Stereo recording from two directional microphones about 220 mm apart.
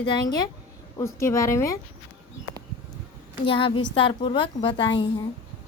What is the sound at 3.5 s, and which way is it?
A woman's voice, 25° left (ahead or behind).